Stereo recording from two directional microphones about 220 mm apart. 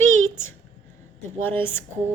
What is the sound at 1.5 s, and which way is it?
Speech, 10° left (ahead or behind).